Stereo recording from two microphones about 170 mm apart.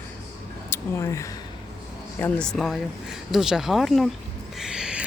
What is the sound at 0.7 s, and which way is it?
Speech, 15° left (ahead or behind).